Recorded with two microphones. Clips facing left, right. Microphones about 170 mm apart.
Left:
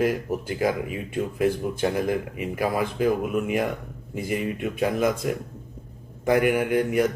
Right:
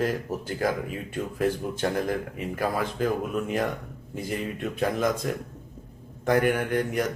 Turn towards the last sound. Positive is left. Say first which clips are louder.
# left 4 dB
turn(degrees=10)  # may be behind; listen again after turning